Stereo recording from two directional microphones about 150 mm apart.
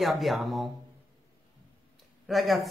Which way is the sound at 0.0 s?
Centre (ahead or behind).